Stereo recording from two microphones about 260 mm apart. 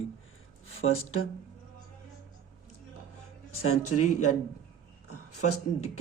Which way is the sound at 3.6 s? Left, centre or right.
Left.